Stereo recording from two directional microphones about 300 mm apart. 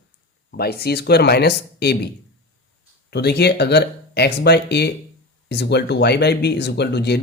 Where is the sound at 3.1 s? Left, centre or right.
Left.